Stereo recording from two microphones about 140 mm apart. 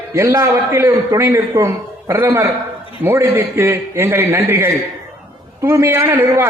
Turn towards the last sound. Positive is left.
turn(degrees=-20)  # may be behind; listen again after turning